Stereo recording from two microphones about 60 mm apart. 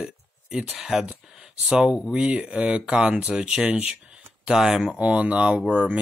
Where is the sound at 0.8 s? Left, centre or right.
Centre.